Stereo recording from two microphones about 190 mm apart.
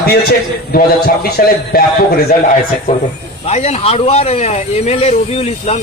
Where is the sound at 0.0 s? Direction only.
55° left (ahead or behind).